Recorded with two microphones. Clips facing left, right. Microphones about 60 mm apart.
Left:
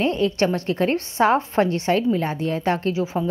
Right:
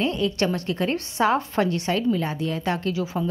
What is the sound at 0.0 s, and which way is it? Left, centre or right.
A woman's voice, left.